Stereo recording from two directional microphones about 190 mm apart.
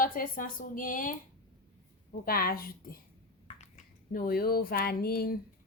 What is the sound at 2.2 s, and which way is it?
Speech, 50° left (ahead or behind).